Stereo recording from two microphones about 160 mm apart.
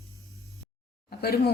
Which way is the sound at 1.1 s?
75° left (ahead or behind).